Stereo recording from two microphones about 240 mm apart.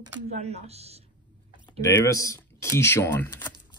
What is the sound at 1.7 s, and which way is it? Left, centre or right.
Speech, centre.